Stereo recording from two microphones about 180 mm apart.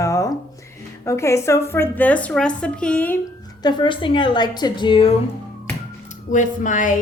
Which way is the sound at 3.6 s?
25° left (ahead or behind).